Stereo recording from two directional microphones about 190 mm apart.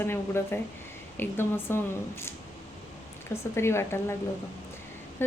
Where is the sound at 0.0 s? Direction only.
10° left (ahead or behind).